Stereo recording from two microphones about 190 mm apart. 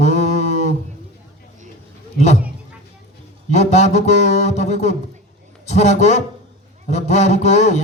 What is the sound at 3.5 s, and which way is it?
A man's voice, 35° left (ahead or behind).